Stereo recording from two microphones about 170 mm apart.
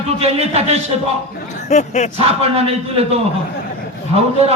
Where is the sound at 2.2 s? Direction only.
35° right (ahead or behind).